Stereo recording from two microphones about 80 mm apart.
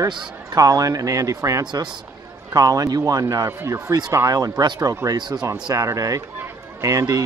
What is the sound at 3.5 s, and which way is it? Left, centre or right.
Speech, right.